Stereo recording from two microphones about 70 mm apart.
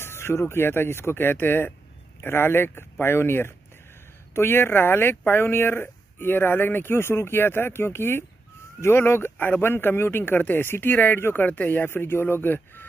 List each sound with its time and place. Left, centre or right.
0.0 s speech: left